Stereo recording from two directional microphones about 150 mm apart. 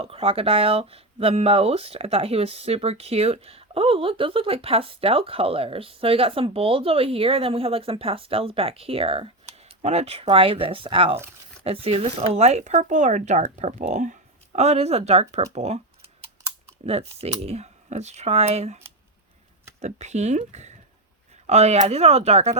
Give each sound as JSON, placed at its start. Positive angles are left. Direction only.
{"t": 0.0, "sound": "speech", "side_deg": -40}
{"t": 16.8, "sound": "speech", "side_deg": -45}
{"t": 19.8, "sound": "speech", "side_deg": -50}